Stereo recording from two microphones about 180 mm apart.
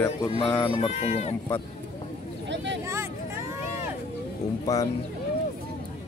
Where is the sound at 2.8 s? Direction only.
15° right (ahead or behind).